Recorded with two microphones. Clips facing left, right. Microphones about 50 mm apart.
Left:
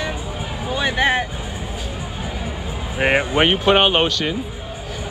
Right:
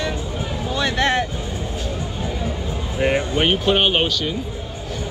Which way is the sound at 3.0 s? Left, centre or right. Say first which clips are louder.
Left 3 dB; left.